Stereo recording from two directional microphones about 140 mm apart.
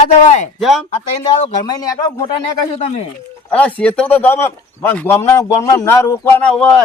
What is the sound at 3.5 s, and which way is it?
A man's voice, 10° left (ahead or behind).